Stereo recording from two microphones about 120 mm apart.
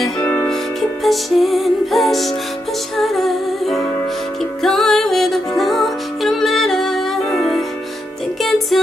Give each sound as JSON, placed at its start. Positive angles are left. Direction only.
{"t": 0.2, "sound": "music", "side_deg": 15}
{"t": 1.0, "sound": "music", "side_deg": 0}